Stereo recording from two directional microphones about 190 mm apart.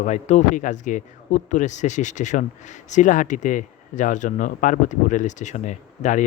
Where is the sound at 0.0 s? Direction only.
40° left (ahead or behind).